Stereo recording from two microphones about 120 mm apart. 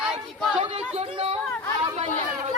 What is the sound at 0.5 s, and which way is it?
Chatter, 55° right (ahead or behind).